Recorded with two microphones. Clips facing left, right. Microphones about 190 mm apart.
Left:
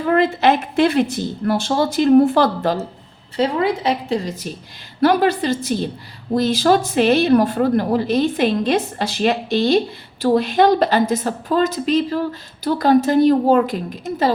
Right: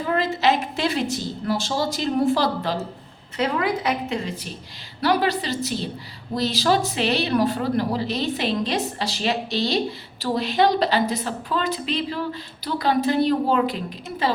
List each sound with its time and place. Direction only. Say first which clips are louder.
0.1 s a woman's voice: left 6 dB; 55° left (ahead or behind)
3.3 s a woman's voice: left 5 dB; 30° left (ahead or behind)
4.9 s a woman's voice: left 6 dB; 50° left (ahead or behind)